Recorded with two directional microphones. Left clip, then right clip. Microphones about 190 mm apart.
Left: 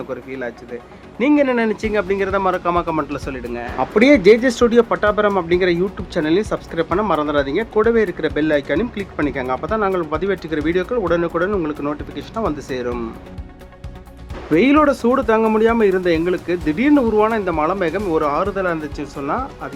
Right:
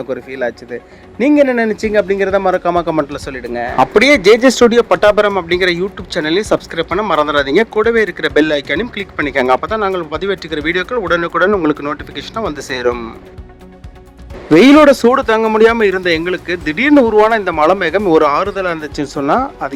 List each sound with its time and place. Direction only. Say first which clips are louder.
0.1 s speech: right 11 dB; 20° right (ahead or behind); by 13.0 s 35° right (ahead or behind)
14.5 s speech: right 8 dB; 25° right (ahead or behind)